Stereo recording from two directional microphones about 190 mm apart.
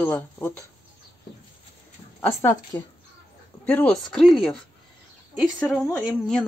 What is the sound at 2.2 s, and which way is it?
A woman's voice, 15° left (ahead or behind).